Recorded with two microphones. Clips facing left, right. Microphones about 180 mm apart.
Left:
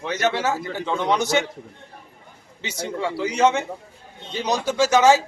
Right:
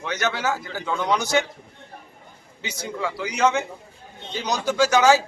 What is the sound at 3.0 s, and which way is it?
Speech, 30° left (ahead or behind).